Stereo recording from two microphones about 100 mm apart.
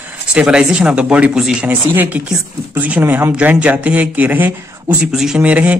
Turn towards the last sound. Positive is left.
turn(degrees=-15)  # may be behind; listen again after turning